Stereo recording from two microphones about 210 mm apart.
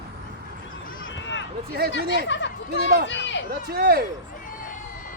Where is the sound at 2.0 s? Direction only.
45° right (ahead or behind).